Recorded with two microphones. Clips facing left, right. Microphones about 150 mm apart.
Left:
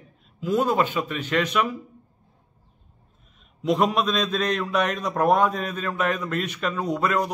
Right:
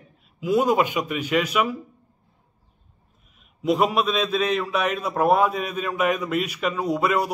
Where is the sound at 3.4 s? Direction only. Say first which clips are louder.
Right 1 dB; 5° right (ahead or behind).